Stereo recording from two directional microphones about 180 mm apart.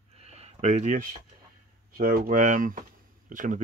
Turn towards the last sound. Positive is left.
turn(degrees=-50)  # may be behind; listen again after turning